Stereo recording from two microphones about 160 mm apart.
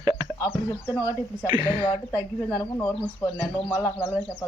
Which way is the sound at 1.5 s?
30° right (ahead or behind).